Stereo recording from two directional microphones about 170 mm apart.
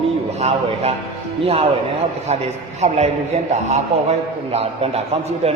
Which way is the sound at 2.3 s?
40° right (ahead or behind).